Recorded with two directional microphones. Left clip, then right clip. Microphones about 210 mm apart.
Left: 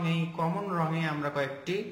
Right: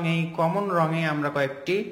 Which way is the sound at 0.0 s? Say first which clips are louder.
Right 7 dB; 25° right (ahead or behind).